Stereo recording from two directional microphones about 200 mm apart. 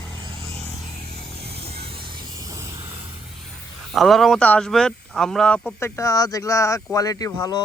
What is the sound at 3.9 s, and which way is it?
Speech, centre (ahead or behind).